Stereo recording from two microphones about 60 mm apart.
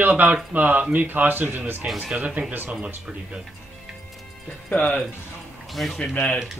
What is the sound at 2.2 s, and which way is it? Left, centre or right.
Speech, centre.